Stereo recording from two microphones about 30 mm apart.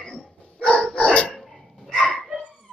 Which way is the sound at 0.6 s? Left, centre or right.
Left.